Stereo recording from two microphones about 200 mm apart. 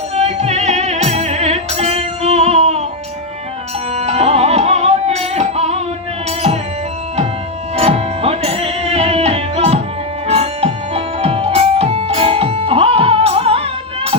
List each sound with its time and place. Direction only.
0.2 s music: 35° right (ahead or behind)
3.9 s music: 30° right (ahead or behind)
7.8 s music: 30° right (ahead or behind)